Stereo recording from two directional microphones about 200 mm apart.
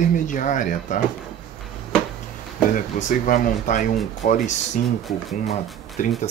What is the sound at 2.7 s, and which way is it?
Speech, 40° left (ahead or behind).